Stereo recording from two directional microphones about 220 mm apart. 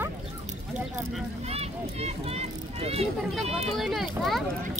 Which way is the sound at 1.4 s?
30° right (ahead or behind).